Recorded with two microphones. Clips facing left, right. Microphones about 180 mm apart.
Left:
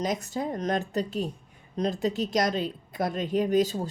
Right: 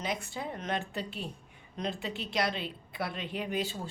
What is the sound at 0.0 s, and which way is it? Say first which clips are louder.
Speech: left 7 dB; 40° left (ahead or behind).